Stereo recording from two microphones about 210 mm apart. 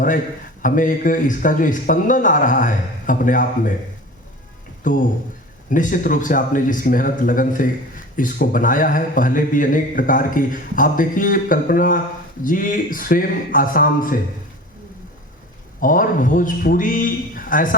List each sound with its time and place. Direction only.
0.6 s speech: 40° left (ahead or behind)
4.8 s speech: 40° left (ahead or behind)
15.8 s speech: 40° left (ahead or behind)